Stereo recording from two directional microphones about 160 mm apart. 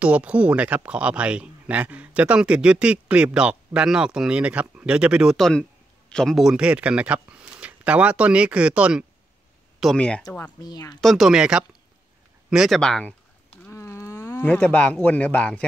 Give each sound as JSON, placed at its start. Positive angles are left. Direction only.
{"t": 0.0, "sound": "speech", "side_deg": -10}
{"t": 10.6, "sound": "speech", "side_deg": 25}
{"t": 11.0, "sound": "speech", "side_deg": 0}
{"t": 13.7, "sound": "speech", "side_deg": 15}